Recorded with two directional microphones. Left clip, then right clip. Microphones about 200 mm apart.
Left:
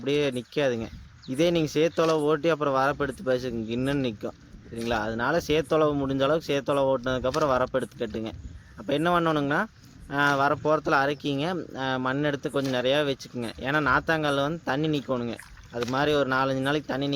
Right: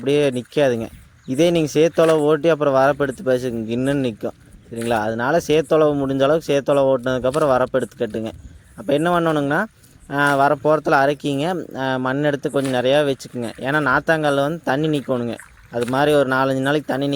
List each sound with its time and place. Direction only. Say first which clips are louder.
0.0 s speech: right 8 dB; 40° right (ahead or behind)